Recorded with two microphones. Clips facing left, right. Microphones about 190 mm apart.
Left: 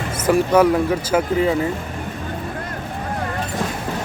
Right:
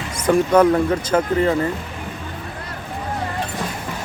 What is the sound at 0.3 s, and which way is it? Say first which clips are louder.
Speech: right 1 dB; 5° left (ahead or behind).